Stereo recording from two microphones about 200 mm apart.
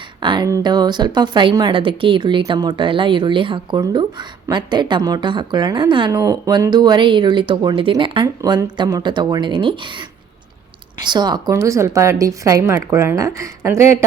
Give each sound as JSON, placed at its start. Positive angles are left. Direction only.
{"t": 0.2, "sound": "a woman's voice", "side_deg": -25}
{"t": 11.0, "sound": "a woman's voice", "side_deg": -20}